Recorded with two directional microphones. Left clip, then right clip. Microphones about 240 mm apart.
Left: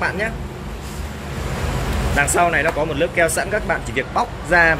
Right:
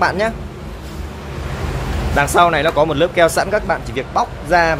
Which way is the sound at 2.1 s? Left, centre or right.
Centre.